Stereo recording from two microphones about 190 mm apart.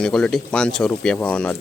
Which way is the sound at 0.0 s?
5° left (ahead or behind).